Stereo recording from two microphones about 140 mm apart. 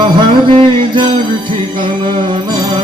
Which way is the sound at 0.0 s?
40° right (ahead or behind).